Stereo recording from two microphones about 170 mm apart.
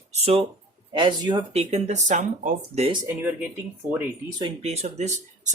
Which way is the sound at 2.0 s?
45° right (ahead or behind).